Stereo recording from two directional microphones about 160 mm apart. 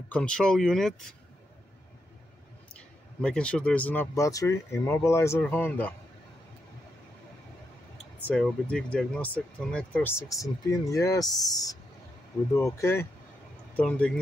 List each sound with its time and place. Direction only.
0.1 s speech: 5° left (ahead or behind)
2.7 s speech: 5° left (ahead or behind)
8.3 s speech: 5° left (ahead or behind)
13.7 s speech: 5° left (ahead or behind)